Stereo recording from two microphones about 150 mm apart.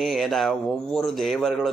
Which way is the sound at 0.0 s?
Centre (ahead or behind).